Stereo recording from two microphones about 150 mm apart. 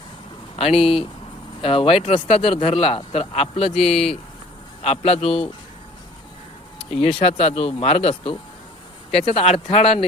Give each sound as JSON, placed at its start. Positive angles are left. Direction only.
{"t": 0.5, "sound": "a man's voice", "side_deg": 40}
{"t": 3.8, "sound": "speech", "side_deg": 0}
{"t": 4.8, "sound": "a man's voice", "side_deg": 45}
{"t": 6.9, "sound": "a man's voice", "side_deg": 40}